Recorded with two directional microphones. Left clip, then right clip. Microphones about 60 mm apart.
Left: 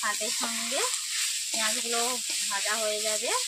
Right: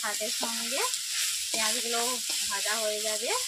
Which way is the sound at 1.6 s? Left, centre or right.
Centre.